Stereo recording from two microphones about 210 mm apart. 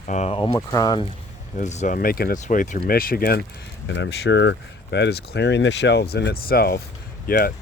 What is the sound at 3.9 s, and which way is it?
Speech, 55° left (ahead or behind).